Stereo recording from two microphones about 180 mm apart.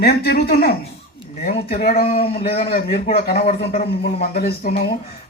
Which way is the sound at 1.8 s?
60° left (ahead or behind).